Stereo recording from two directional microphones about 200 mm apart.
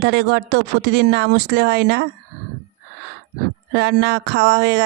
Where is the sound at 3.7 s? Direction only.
60° right (ahead or behind).